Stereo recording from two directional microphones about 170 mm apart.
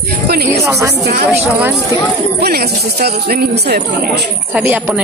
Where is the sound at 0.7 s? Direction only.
15° right (ahead or behind).